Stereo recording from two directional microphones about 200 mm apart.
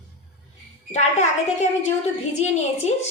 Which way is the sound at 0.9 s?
35° left (ahead or behind).